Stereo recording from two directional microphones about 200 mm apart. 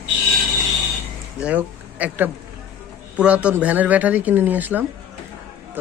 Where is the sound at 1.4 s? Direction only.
5° right (ahead or behind).